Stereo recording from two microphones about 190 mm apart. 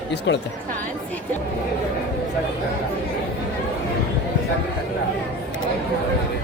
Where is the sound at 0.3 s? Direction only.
75° left (ahead or behind).